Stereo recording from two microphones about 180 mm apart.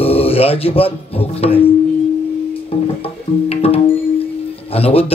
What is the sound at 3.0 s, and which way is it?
Music, 35° left (ahead or behind).